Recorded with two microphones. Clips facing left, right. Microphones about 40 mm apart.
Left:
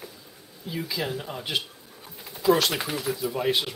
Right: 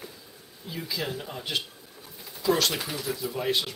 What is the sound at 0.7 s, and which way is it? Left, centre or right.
Speech, centre.